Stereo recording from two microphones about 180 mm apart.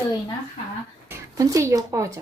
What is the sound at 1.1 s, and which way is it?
Speech, 15° right (ahead or behind).